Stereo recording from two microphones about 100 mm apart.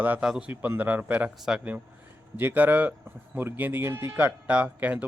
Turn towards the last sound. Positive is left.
turn(degrees=-15)  # may be behind; listen again after turning